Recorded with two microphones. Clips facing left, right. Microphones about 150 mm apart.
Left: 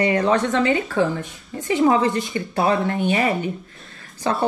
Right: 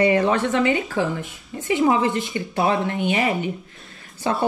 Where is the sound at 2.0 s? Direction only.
25° right (ahead or behind).